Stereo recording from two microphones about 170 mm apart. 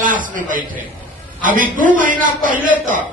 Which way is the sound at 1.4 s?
50° right (ahead or behind).